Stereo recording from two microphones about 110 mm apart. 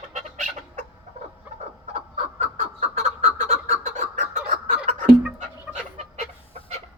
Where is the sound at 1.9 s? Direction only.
90° right.